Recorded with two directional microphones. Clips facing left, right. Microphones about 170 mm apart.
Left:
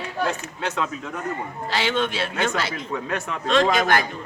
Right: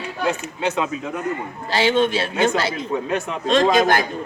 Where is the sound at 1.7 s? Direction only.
35° right (ahead or behind).